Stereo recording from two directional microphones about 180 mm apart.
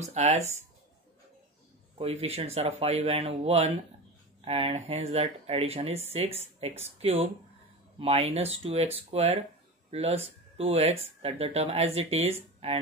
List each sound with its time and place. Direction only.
0.0 s speech: 35° right (ahead or behind)
2.0 s speech: 35° right (ahead or behind)